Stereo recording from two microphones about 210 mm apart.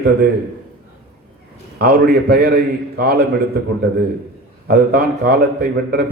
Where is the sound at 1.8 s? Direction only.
50° right (ahead or behind).